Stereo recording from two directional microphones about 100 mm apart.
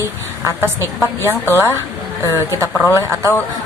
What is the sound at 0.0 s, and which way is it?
A woman's voice, 30° right (ahead or behind).